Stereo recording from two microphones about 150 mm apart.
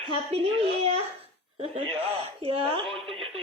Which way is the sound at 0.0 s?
35° right (ahead or behind).